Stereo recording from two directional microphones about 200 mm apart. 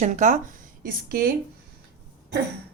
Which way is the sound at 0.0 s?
40° right (ahead or behind).